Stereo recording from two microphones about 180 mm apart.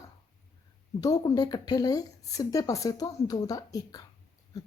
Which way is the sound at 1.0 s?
20° left (ahead or behind).